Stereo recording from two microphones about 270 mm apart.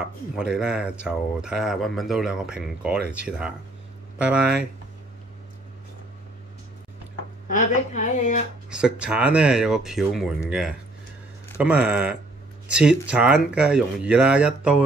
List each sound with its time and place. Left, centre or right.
0.4 s speech: centre
7.4 s a woman's voice: left
8.6 s speech: centre
11.5 s speech: centre